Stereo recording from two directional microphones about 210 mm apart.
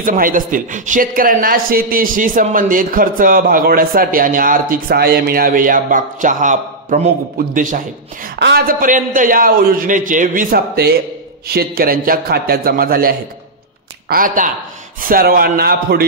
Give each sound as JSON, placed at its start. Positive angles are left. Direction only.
{"t": 0.0, "sound": "speech", "side_deg": -40}
{"t": 8.4, "sound": "a man's voice", "side_deg": -50}